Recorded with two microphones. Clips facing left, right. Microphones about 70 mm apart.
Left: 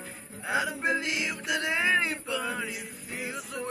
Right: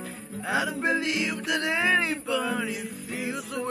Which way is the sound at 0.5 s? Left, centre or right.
Centre.